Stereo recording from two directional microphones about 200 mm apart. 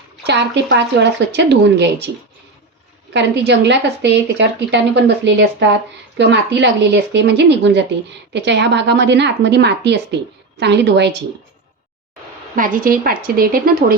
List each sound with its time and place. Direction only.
0.3 s a woman's voice: 60° right (ahead or behind)
3.1 s a woman's voice: 60° right (ahead or behind)
12.5 s a woman's voice: 45° right (ahead or behind)